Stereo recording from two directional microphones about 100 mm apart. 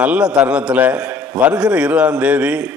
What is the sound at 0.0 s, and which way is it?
A man's voice, 10° right (ahead or behind).